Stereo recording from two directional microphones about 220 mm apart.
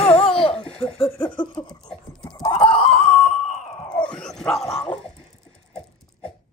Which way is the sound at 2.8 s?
5° left (ahead or behind).